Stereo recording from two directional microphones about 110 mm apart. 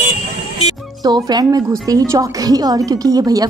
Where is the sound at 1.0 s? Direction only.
35° right (ahead or behind).